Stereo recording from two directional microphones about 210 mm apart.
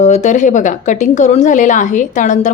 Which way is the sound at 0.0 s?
35° left (ahead or behind).